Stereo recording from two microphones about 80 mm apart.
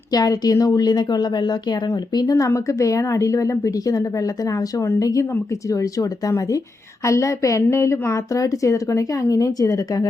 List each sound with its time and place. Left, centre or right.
0.1 s speech: left
2.1 s a woman's voice: left